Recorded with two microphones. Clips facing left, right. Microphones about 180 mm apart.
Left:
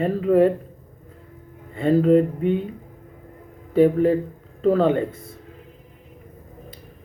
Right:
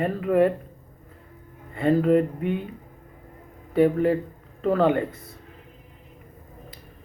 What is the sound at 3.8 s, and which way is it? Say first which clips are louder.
Speech: left 3 dB; 25° left (ahead or behind).